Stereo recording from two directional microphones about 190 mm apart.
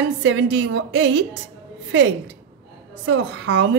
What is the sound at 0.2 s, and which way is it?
A woman's voice, 75° right (ahead or behind).